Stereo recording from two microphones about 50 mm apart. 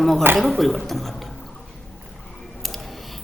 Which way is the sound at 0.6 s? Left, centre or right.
Centre.